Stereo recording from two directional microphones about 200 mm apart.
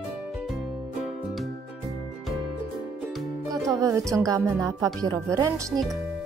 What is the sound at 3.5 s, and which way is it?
Speech, 15° right (ahead or behind).